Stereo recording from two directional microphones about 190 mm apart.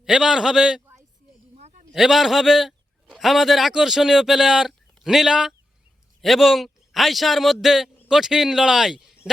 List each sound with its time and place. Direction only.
0.0 s a man's voice: 5° right (ahead or behind)
1.5 s a sound: 35° right (ahead or behind)
1.9 s a man's voice: centre (ahead or behind)